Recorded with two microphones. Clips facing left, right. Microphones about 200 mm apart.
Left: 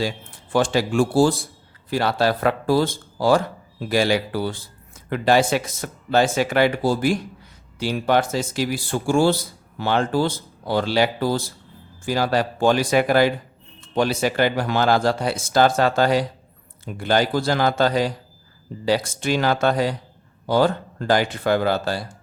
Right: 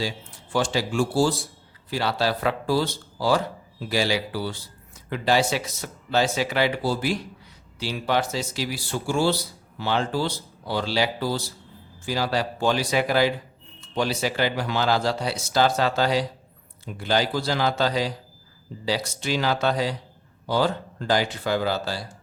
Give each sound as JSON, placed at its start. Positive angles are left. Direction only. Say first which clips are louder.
{"t": 0.5, "sound": "speech", "louder": "left 5 dB", "side_deg": 55}